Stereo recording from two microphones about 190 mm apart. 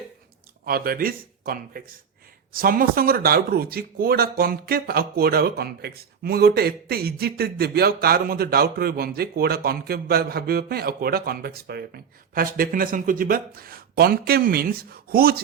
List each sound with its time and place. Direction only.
0.6 s speech: 50° right (ahead or behind)